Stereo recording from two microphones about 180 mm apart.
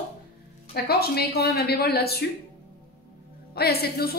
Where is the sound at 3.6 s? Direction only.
60° left (ahead or behind).